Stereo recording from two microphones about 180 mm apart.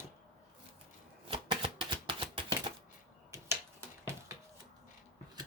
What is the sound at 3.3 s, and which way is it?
Finger snapping, 15° right (ahead or behind).